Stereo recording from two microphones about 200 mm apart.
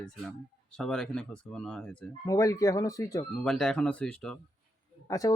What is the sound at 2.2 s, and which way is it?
Speech, 15° left (ahead or behind).